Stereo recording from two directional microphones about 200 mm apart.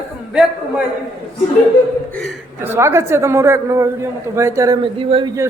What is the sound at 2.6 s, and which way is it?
A man's voice, 15° right (ahead or behind).